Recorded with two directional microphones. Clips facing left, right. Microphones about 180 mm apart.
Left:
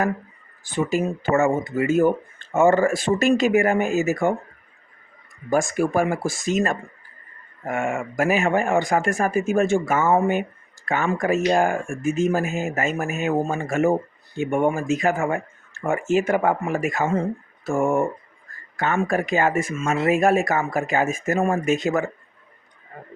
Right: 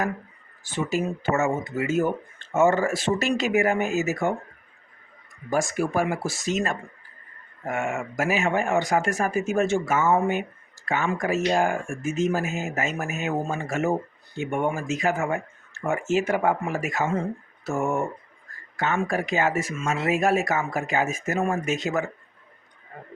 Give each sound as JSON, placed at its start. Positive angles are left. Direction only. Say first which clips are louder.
{"t": 0.9, "sound": "speech", "louder": "left 2 dB", "side_deg": 55}
{"t": 5.5, "sound": "speech", "louder": "left 4 dB", "side_deg": 50}